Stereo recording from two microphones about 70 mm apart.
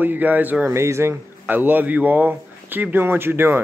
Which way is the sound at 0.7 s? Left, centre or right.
Right.